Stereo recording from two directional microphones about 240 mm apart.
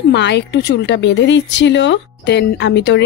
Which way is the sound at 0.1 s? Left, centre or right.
Left.